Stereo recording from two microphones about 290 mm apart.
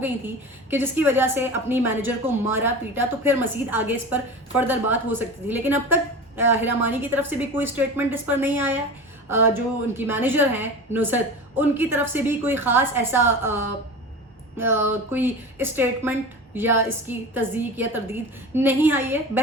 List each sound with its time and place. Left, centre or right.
0.7 s a woman's voice: centre
14.6 s a woman's voice: centre